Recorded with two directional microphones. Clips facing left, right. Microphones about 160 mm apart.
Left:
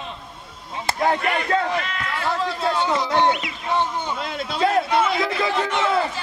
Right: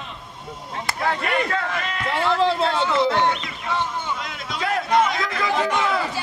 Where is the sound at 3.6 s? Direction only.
20° left (ahead or behind).